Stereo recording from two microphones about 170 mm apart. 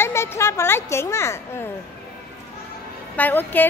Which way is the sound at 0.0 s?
15° left (ahead or behind).